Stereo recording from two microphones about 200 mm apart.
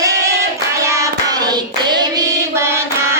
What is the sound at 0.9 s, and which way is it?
Hands, 15° right (ahead or behind).